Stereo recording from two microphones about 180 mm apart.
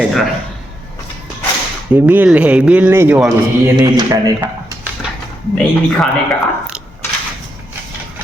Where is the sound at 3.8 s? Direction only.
20° right (ahead or behind).